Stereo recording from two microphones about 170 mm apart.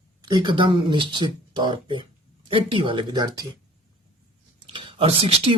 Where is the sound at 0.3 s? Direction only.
25° right (ahead or behind).